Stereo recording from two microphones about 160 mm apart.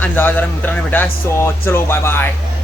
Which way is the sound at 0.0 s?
10° left (ahead or behind).